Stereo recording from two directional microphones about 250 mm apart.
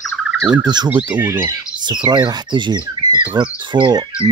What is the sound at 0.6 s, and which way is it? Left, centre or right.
Speech, centre.